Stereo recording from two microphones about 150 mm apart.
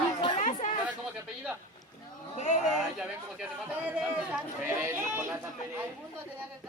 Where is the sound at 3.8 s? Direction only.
10° right (ahead or behind).